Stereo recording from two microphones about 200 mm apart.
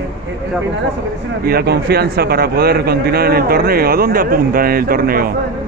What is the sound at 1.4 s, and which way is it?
A man's voice, 50° right (ahead or behind).